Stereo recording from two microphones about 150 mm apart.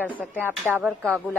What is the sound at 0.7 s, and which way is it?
Speech, 10° right (ahead or behind).